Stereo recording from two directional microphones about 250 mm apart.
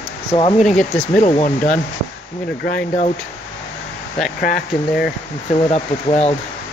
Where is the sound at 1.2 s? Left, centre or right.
Left.